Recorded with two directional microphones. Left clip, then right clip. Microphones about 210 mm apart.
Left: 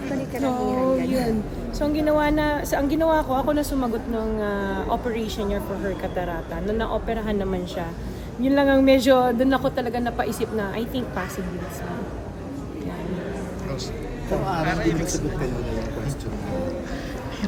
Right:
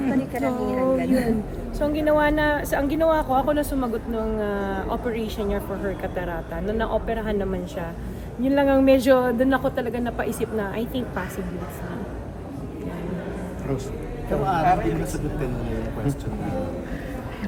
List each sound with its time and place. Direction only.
0.3 s a woman's voice: centre (ahead or behind)
14.4 s speech: 30° right (ahead or behind)